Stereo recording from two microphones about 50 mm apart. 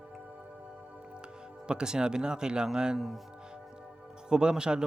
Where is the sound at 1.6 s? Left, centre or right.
Centre.